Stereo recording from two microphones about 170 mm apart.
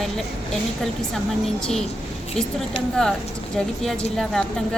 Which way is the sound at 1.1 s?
5° left (ahead or behind).